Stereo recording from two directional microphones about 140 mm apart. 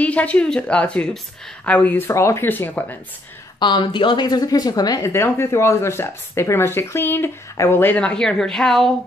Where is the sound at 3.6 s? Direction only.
35° left (ahead or behind).